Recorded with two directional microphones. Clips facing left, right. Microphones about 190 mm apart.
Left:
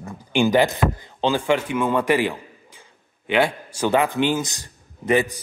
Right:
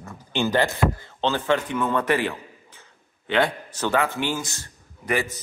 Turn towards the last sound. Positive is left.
turn(degrees=20)  # may be behind; listen again after turning